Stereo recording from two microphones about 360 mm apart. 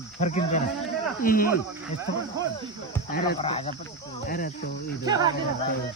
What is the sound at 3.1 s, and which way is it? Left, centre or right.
Speech, centre.